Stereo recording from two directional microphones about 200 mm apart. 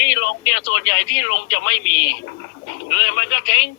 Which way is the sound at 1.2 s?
70° left (ahead or behind).